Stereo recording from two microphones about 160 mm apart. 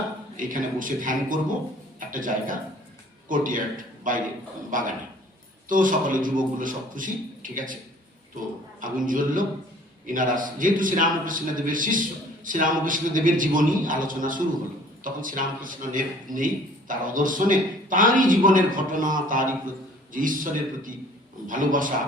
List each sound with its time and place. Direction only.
0.3 s a man's voice: 55° right (ahead or behind)
8.8 s a man's voice: 55° right (ahead or behind)